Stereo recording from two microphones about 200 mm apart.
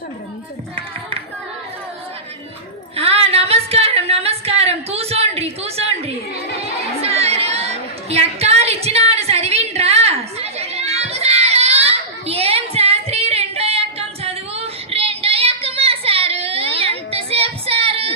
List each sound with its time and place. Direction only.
2.9 s female singing: 30° right (ahead or behind)
7.0 s chatter: 30° right (ahead or behind)